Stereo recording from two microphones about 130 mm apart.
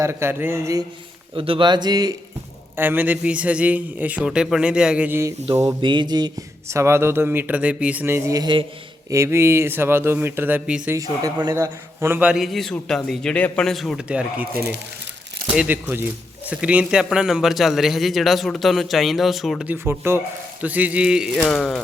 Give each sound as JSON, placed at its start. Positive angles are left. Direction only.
{"t": 0.0, "sound": "speech", "side_deg": -20}
{"t": 1.4, "sound": "speech", "side_deg": -40}
{"t": 2.7, "sound": "a man's voice", "side_deg": -15}
{"t": 5.8, "sound": "a man's voice", "side_deg": -35}
{"t": 10.9, "sound": "speech", "side_deg": -30}
{"t": 11.5, "sound": "a man's voice", "side_deg": -20}
{"t": 15.5, "sound": "a man's voice", "side_deg": -15}
{"t": 19.6, "sound": "a man's voice", "side_deg": -15}